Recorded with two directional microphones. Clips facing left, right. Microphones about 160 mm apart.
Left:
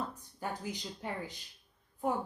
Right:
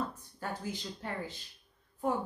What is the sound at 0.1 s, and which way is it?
Speech, 15° left (ahead or behind).